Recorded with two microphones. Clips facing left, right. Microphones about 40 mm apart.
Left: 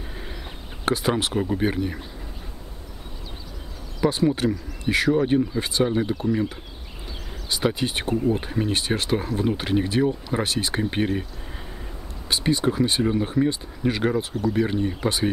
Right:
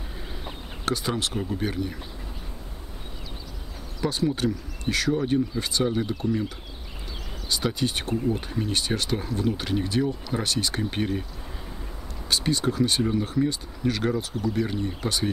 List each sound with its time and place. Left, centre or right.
0.8 s speech: left
4.0 s speech: left
7.4 s speech: centre
12.3 s speech: centre